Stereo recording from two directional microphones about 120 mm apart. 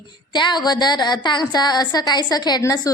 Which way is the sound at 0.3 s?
40° left (ahead or behind).